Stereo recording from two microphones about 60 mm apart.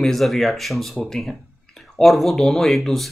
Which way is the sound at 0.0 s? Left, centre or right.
Centre.